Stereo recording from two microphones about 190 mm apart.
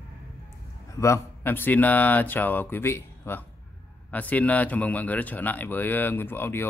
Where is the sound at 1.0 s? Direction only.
10° left (ahead or behind).